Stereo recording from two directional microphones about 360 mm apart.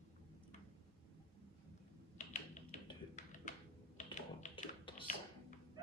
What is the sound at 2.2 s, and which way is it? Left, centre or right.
Typing, centre.